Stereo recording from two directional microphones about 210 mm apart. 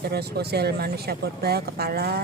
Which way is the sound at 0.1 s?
50° right (ahead or behind).